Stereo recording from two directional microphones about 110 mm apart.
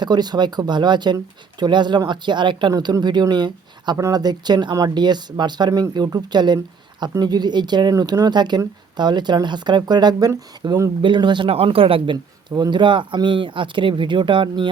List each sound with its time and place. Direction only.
0.0 s speech: 40° right (ahead or behind)
11.0 s speech: 45° right (ahead or behind)
11.4 s speech: 60° right (ahead or behind)
12.1 s speech: 40° right (ahead or behind)